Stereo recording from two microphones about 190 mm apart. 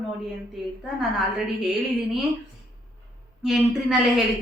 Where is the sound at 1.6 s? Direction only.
Centre (ahead or behind).